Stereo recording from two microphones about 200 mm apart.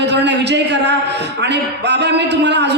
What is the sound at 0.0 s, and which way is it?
A man's voice, 60° right (ahead or behind).